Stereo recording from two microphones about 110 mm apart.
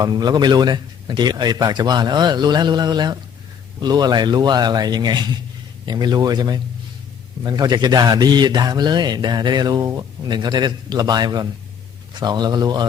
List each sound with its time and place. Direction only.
0.0 s speech: 35° right (ahead or behind)